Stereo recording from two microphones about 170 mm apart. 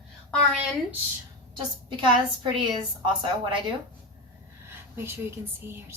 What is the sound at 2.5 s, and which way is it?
Speech, 30° right (ahead or behind).